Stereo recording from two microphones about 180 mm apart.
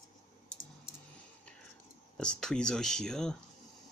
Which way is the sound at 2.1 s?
5° left (ahead or behind).